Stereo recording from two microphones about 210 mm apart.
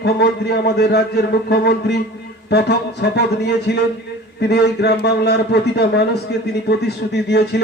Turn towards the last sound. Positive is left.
turn(degrees=55)  # may be behind; listen again after turning